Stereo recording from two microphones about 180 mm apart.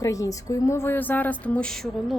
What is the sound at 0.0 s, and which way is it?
A woman's voice, 20° left (ahead or behind).